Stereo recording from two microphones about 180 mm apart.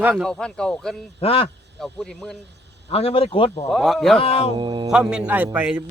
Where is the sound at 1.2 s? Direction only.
30° left (ahead or behind).